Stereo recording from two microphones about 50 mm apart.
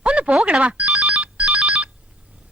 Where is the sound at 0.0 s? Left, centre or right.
Right.